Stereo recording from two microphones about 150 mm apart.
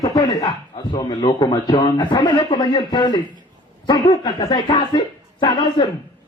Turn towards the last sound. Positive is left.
turn(degrees=30)  # may be behind; listen again after turning